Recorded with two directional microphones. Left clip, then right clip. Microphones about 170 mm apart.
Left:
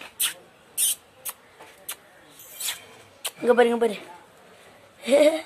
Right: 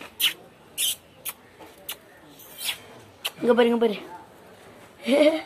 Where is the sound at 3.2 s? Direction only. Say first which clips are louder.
Left 1 dB; 30° left (ahead or behind).